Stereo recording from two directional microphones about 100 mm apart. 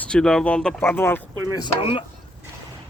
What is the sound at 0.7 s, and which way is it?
Speech, 20° left (ahead or behind).